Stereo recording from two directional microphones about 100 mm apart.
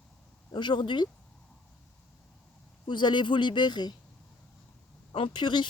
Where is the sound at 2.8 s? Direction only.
50° left (ahead or behind).